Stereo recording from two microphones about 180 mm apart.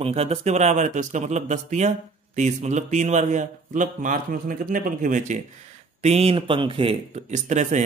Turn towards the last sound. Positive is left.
turn(degrees=-40)  # may be behind; listen again after turning